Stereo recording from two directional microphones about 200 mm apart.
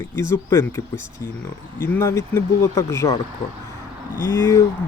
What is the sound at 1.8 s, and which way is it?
Speech, 15° left (ahead or behind).